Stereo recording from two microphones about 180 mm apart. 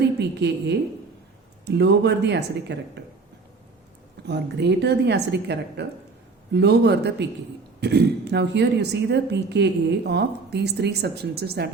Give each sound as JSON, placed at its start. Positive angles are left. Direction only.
{"t": 0.2, "sound": "a woman's voice", "side_deg": -70}
{"t": 4.3, "sound": "a woman's voice", "side_deg": -70}